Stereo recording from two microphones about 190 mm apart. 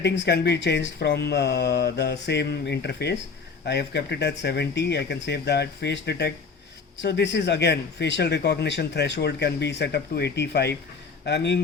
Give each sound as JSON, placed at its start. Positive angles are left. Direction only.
{"t": 0.0, "sound": "speech", "side_deg": 60}